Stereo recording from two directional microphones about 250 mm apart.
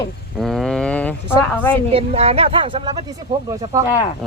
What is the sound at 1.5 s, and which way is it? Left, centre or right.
Speech, centre.